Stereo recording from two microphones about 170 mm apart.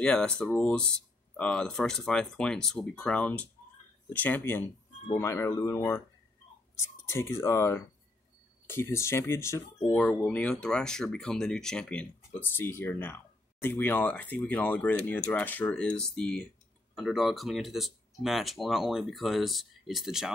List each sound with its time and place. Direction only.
0.0 s speech: 5° left (ahead or behind)